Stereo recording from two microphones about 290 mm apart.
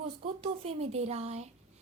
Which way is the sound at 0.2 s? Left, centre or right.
Centre.